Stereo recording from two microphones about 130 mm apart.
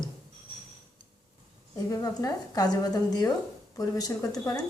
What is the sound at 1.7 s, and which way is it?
A woman's voice, 25° left (ahead or behind).